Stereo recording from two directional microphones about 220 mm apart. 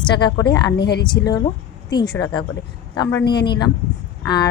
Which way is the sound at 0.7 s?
50° left (ahead or behind).